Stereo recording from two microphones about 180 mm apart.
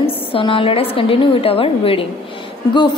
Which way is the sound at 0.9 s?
30° left (ahead or behind).